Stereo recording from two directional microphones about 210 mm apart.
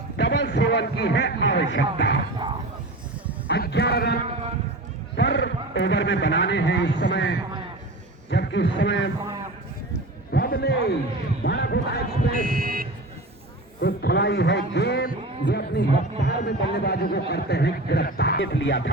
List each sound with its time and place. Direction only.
0.2 s a man's voice: 55° left (ahead or behind)
3.5 s a man's voice: 50° left (ahead or behind)
9.1 s a sound: 20° right (ahead or behind)
10.3 s a man's voice: 50° left (ahead or behind)
12.3 s speech: 40° right (ahead or behind)
13.8 s a man's voice: 50° left (ahead or behind)